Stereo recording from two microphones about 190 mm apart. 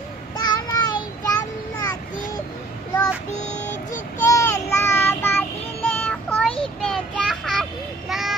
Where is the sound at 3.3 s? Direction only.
40° left (ahead or behind).